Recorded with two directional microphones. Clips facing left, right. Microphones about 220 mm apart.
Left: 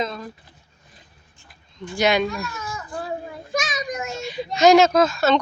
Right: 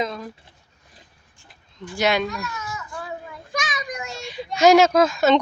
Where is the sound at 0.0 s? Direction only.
10° right (ahead or behind).